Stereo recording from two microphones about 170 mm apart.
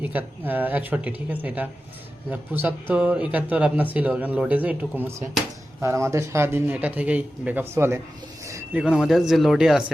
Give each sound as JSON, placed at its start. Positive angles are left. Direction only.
{"t": 0.0, "sound": "speech", "side_deg": -10}
{"t": 8.4, "sound": "a sound", "side_deg": -20}
{"t": 8.8, "sound": "speech", "side_deg": -5}